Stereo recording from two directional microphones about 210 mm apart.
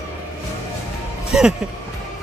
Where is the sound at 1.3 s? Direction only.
5° right (ahead or behind).